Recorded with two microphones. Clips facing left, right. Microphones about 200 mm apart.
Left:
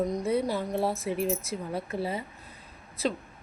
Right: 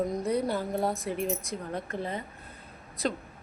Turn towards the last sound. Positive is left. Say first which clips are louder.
# left 1 dB
turn(degrees=0)  # may be behind; listen again after turning